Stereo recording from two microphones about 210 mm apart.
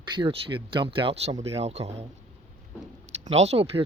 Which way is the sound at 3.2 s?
30° right (ahead or behind).